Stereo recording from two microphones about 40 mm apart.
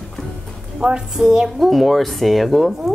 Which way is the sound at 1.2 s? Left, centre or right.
Centre.